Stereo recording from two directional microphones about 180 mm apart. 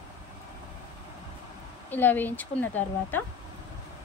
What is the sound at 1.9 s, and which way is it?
Speech, 10° left (ahead or behind).